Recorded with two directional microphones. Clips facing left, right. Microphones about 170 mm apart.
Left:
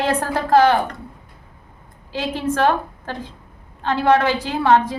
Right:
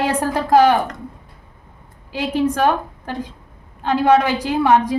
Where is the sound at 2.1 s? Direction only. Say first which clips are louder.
Right 3 dB; 15° right (ahead or behind).